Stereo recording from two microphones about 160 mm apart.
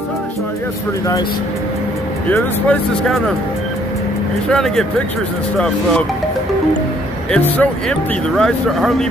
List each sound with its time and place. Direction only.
2.3 s speech: 10° left (ahead or behind)
4.5 s speech: 5° left (ahead or behind)
7.2 s speech: 10° left (ahead or behind)